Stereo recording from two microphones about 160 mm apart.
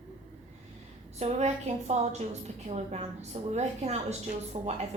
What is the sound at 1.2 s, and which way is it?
A woman's voice, 45° right (ahead or behind).